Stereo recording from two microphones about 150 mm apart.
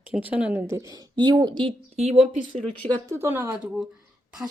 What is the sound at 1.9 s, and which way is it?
Speech, 45° right (ahead or behind).